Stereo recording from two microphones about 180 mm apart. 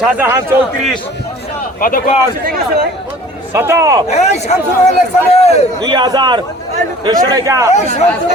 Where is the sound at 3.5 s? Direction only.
15° right (ahead or behind).